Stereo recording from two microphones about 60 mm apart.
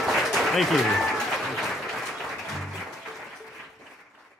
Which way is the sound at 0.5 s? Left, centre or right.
Centre.